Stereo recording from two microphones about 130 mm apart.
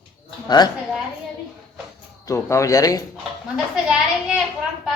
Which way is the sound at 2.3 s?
20° left (ahead or behind).